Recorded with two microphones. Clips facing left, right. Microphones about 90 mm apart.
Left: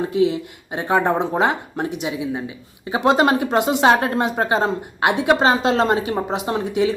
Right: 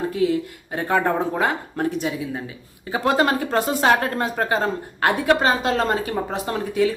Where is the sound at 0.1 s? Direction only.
20° left (ahead or behind).